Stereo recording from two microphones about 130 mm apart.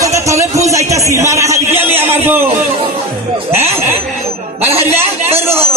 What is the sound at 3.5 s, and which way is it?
Snicker, 20° right (ahead or behind).